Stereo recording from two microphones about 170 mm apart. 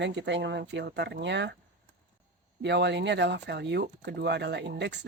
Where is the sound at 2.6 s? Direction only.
90° right.